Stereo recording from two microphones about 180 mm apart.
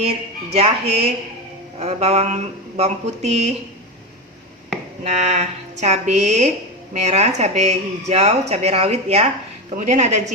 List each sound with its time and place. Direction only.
0.5 s speech: 35° right (ahead or behind)
5.0 s speech: 40° right (ahead or behind)